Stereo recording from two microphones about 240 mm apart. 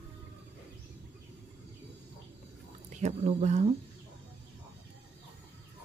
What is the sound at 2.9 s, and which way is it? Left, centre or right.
Speech, right.